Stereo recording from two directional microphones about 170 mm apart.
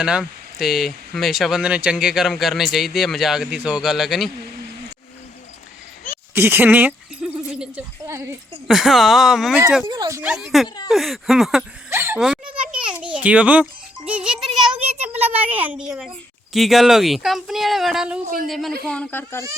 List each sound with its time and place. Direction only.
0.0 s speech: 5° right (ahead or behind)
6.3 s speech: 10° right (ahead or behind)
8.0 s speech: 15° right (ahead or behind)
8.6 s speech: centre (ahead or behind)
9.8 s speech: 25° right (ahead or behind)
10.2 s speech: 5° right (ahead or behind)
11.9 s a child's voice: 15° right (ahead or behind); by 19.5 s 10° left (ahead or behind)